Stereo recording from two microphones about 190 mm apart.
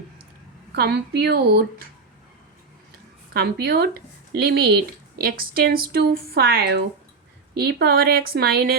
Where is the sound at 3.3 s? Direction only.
55° right (ahead or behind).